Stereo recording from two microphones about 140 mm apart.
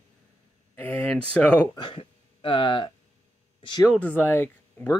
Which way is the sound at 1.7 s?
40° left (ahead or behind).